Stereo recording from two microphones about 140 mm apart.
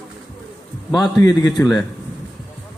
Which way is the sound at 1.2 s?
20° left (ahead or behind).